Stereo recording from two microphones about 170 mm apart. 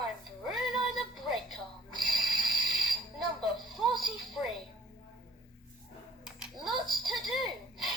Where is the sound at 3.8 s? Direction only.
Centre (ahead or behind).